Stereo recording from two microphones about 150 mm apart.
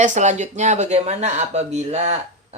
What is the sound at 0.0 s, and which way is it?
Speech, 55° right (ahead or behind).